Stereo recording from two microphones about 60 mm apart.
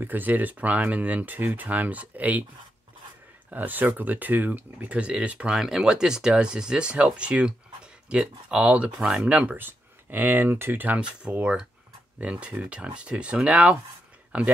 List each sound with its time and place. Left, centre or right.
0.0 s speech: right
3.4 s speech: right
11.0 s speech: right